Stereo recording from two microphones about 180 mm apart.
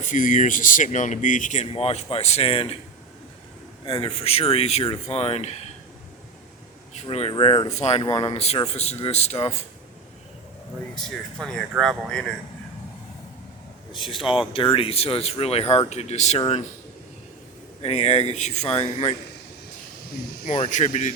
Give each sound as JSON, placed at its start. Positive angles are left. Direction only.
{"t": 0.0, "sound": "speech", "side_deg": 45}
{"t": 3.8, "sound": "speech", "side_deg": 30}
{"t": 6.9, "sound": "speech", "side_deg": 35}
{"t": 10.9, "sound": "speech", "side_deg": 5}
{"t": 13.9, "sound": "speech", "side_deg": 25}
{"t": 17.8, "sound": "speech", "side_deg": 35}
{"t": 20.5, "sound": "speech", "side_deg": 40}